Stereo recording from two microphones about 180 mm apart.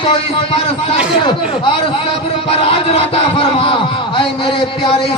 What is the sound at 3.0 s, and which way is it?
Speech, 30° left (ahead or behind).